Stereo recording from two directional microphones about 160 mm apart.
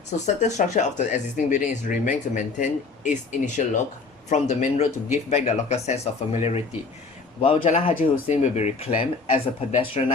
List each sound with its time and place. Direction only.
0.4 s speech: 45° left (ahead or behind)